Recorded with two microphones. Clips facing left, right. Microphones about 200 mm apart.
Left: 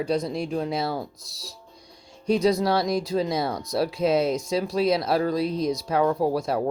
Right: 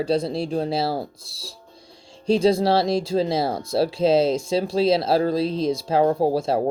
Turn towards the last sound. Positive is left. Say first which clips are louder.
# right 3 dB
turn(degrees=-30)  # may be behind; listen again after turning